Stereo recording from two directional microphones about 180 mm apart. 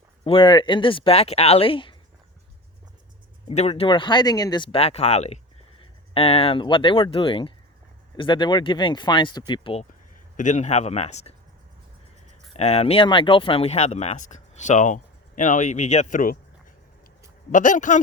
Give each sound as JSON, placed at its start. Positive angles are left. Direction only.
{"t": 0.3, "sound": "speech", "side_deg": 30}
{"t": 3.5, "sound": "speech", "side_deg": 35}
{"t": 10.3, "sound": "speech", "side_deg": 40}
{"t": 12.5, "sound": "speech", "side_deg": 35}
{"t": 17.5, "sound": "speech", "side_deg": 45}